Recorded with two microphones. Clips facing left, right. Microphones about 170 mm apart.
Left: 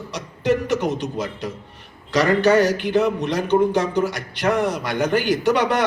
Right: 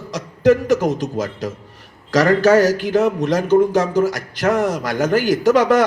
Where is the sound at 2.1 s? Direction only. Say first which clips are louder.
Right 3 dB; 45° right (ahead or behind).